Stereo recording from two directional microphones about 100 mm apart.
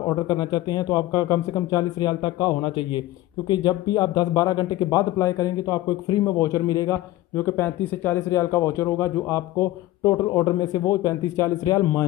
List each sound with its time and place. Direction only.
0.1 s speech: 40° left (ahead or behind)
2.6 s a man's voice: 55° left (ahead or behind)
3.4 s speech: 45° left (ahead or behind)
7.3 s speech: 20° left (ahead or behind)
8.3 s speech: 30° left (ahead or behind)